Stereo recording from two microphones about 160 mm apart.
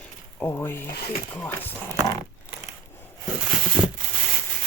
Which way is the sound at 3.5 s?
5° right (ahead or behind).